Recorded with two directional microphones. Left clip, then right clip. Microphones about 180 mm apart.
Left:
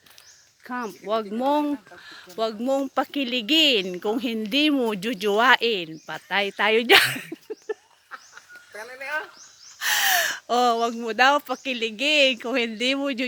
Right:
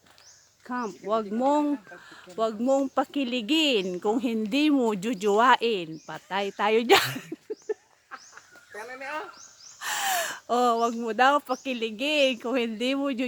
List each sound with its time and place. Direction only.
0.7 s speech: centre (ahead or behind)
7.7 s a sound: 10° left (ahead or behind)
9.8 s speech: 10° left (ahead or behind)